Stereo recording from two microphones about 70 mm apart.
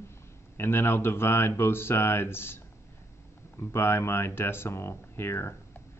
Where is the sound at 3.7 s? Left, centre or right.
Left.